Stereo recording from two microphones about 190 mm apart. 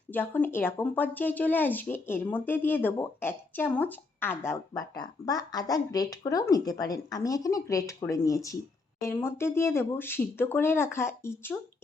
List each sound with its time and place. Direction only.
0.1 s speech: 10° left (ahead or behind)